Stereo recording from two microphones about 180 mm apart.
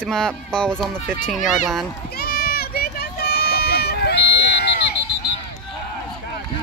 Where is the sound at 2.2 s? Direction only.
60° left (ahead or behind).